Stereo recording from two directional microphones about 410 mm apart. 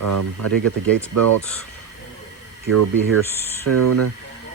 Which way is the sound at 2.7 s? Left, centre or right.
Right.